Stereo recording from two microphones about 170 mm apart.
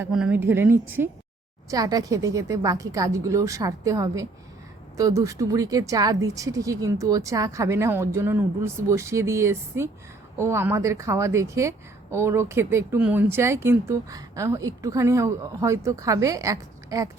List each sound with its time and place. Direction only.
0.0 s speech: 5° right (ahead or behind)